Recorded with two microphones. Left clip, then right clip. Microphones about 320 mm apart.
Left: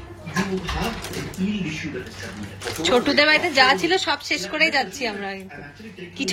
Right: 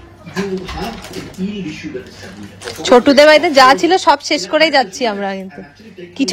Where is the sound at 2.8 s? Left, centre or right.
Right.